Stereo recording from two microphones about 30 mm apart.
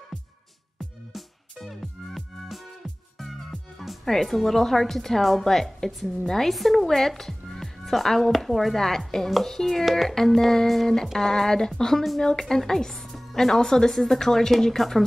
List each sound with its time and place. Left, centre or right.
1.7 s speech: centre
4.0 s speech: centre
14.8 s a woman's voice: centre